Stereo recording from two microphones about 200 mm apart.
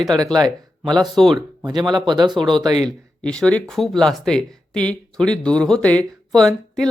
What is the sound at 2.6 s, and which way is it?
Speech, 20° right (ahead or behind).